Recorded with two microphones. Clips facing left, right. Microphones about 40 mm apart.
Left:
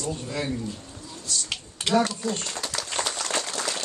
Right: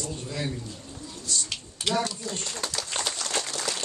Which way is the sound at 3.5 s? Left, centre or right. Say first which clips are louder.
Left 2 dB; centre.